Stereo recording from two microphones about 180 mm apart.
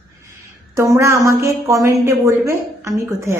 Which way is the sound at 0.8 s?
15° right (ahead or behind).